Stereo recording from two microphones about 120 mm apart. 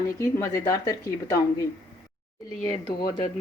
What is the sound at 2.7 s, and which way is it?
Speech, 45° left (ahead or behind).